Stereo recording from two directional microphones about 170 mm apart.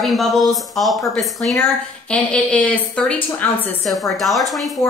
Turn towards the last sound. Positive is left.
turn(degrees=0)  # may be behind; listen again after turning